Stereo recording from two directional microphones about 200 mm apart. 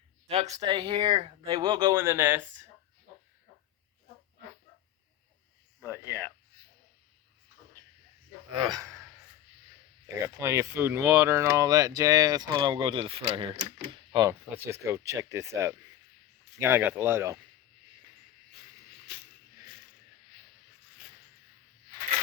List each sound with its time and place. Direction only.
0.3 s speech: 35° right (ahead or behind); by 2.6 s 10° right (ahead or behind)
8.5 s speech: 20° right (ahead or behind)
10.2 s speech: 15° right (ahead or behind)